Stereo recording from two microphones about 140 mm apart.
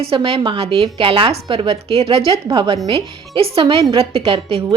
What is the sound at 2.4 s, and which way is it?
Speech, 30° right (ahead or behind).